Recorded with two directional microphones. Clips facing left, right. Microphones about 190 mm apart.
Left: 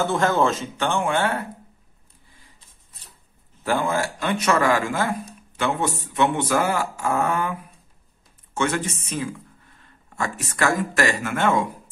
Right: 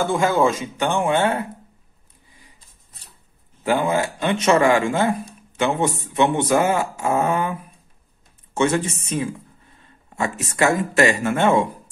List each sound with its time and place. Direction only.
0.0 s a man's voice: 10° right (ahead or behind)
3.6 s speech: 15° right (ahead or behind)
8.5 s speech: 25° right (ahead or behind)